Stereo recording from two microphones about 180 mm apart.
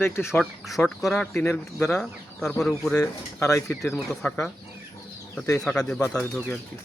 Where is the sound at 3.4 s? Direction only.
15° left (ahead or behind).